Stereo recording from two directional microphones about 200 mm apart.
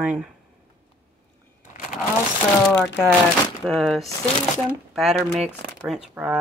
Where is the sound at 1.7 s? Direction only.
40° left (ahead or behind).